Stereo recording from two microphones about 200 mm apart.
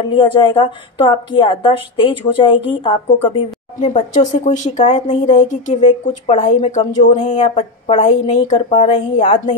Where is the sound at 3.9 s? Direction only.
40° left (ahead or behind).